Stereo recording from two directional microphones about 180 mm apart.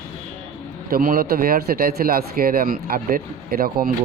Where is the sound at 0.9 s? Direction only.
55° right (ahead or behind).